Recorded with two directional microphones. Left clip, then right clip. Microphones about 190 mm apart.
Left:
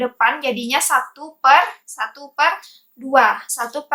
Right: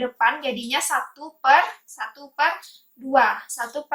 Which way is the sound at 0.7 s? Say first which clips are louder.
Left 6 dB; 45° left (ahead or behind).